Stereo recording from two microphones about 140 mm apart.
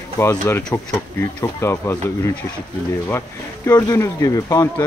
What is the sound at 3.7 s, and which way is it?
Speech, 25° left (ahead or behind).